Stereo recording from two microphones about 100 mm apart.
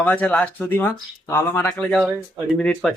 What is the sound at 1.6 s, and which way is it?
Speech, 10° left (ahead or behind).